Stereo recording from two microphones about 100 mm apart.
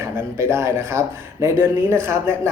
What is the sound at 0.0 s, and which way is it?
Speech, 25° right (ahead or behind).